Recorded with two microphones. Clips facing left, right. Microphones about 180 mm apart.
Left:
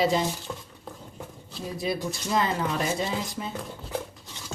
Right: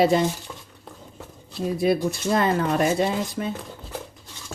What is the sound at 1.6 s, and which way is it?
Speech, 55° right (ahead or behind).